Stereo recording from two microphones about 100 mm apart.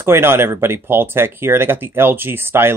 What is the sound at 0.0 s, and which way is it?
Speech, 25° right (ahead or behind).